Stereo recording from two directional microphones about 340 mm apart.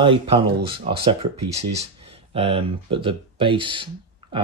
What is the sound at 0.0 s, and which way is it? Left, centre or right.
Speech, centre.